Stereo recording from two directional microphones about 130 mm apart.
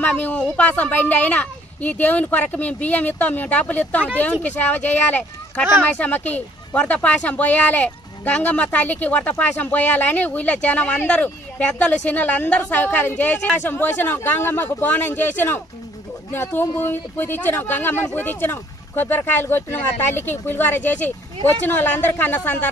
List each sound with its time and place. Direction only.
0.0 s speech: 15° left (ahead or behind)